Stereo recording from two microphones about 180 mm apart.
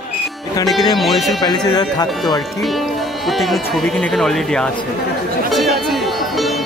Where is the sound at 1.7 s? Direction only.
20° left (ahead or behind).